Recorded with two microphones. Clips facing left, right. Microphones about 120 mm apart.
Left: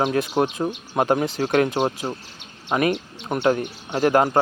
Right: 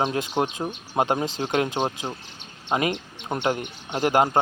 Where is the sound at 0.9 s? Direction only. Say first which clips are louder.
Left 2 dB; 25° right (ahead or behind).